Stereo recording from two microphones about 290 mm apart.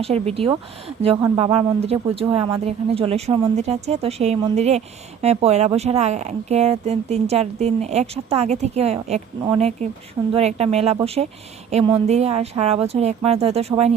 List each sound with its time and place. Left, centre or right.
0.0 s a woman's voice: centre